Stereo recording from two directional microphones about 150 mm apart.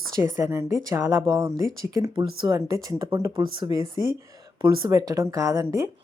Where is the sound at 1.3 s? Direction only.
30° right (ahead or behind).